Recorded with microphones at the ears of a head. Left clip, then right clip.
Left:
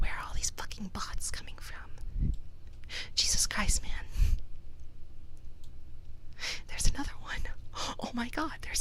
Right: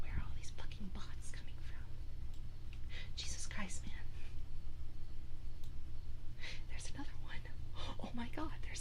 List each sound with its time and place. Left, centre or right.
0.0 s whispering: left
6.3 s whispering: left